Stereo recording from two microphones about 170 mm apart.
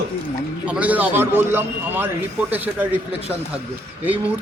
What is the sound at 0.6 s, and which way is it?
Speech, 10° right (ahead or behind).